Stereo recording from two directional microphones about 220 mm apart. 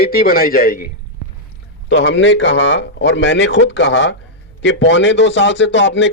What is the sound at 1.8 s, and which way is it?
A man's voice, 55° left (ahead or behind).